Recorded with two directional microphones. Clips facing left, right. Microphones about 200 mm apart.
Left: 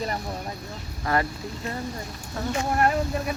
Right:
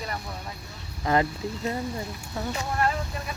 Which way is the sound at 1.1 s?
20° right (ahead or behind).